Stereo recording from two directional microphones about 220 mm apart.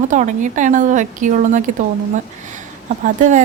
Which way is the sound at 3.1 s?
35° right (ahead or behind).